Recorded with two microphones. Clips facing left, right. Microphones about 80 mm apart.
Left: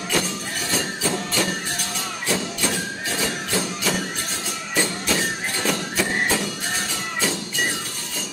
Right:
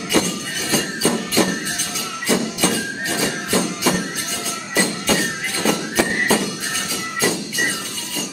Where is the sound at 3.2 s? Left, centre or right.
Right.